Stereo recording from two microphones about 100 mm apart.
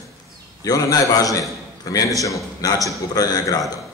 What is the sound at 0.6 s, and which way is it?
A man's voice, 40° left (ahead or behind).